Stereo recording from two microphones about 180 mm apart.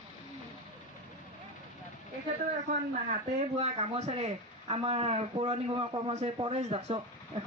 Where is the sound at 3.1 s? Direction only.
40° right (ahead or behind).